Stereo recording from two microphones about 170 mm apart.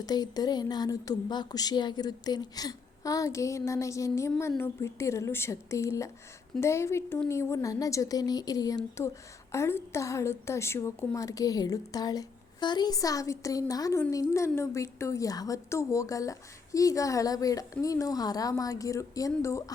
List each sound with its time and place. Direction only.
0.0 s a woman's voice: 25° left (ahead or behind)